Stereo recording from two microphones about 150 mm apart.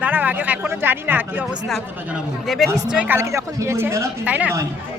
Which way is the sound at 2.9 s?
10° right (ahead or behind).